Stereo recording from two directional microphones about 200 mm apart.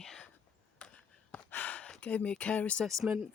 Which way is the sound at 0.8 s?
5° left (ahead or behind).